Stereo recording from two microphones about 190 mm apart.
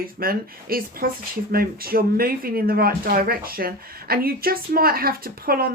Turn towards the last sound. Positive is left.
turn(degrees=-50)  # may be behind; listen again after turning